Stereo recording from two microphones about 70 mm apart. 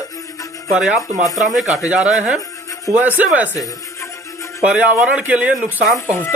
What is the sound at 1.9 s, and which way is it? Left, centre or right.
A man's voice, centre.